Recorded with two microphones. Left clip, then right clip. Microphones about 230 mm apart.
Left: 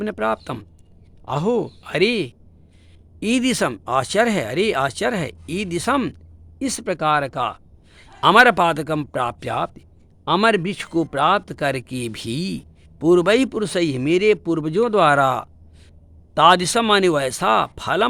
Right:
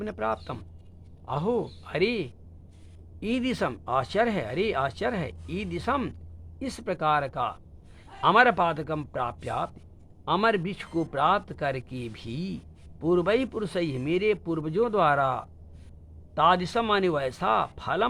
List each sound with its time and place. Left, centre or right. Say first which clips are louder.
0.0 s a man's voice: left 8 dB; left